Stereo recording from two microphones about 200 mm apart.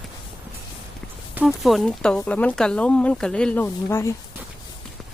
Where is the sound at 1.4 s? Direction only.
Centre (ahead or behind).